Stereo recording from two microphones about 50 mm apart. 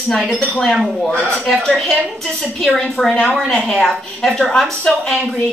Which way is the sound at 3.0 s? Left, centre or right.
Centre.